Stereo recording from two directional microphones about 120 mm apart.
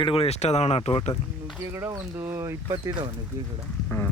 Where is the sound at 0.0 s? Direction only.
50° left (ahead or behind).